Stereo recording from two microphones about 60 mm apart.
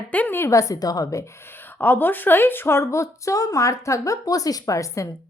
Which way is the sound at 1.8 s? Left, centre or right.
Left.